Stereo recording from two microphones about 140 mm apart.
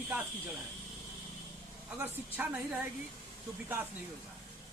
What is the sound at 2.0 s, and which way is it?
Speech, 15° right (ahead or behind).